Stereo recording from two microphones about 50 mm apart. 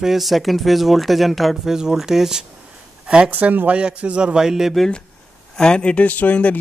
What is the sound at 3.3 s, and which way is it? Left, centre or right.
Speech, right.